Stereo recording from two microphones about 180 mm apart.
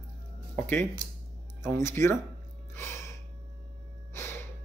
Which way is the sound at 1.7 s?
15° left (ahead or behind).